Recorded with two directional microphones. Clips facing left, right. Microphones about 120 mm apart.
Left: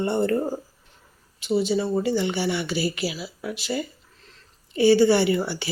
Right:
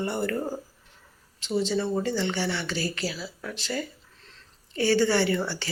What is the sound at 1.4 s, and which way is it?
Speech, 10° left (ahead or behind).